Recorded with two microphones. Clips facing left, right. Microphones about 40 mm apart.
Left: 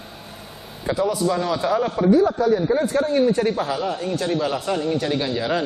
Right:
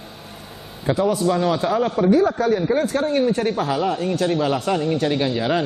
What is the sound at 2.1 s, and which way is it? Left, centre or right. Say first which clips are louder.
A man's voice: left 2 dB; right.